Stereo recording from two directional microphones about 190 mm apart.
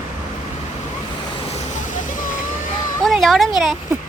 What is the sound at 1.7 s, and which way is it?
Vehicle, 45° left (ahead or behind).